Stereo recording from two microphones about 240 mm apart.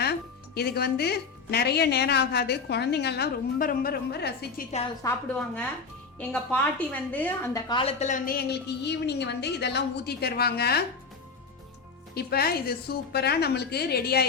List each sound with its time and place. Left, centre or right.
0.0 s a woman's voice: left
5.0 s a woman's voice: centre; by 10.8 s left
12.1 s a woman's voice: left